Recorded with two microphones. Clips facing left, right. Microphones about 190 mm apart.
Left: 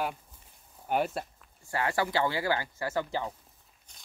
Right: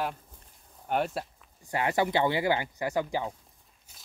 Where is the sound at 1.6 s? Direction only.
20° right (ahead or behind).